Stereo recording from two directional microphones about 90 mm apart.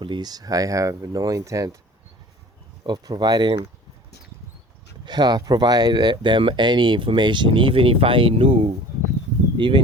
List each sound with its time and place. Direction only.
0.0 s speech: 55° right (ahead or behind); by 1.7 s 40° right (ahead or behind)
2.8 s speech: 50° right (ahead or behind)
5.0 s speech: 50° right (ahead or behind); by 8.7 s 90° right
9.6 s speech: 60° right (ahead or behind)